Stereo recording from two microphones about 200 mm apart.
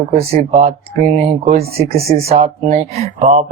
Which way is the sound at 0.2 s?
35° right (ahead or behind).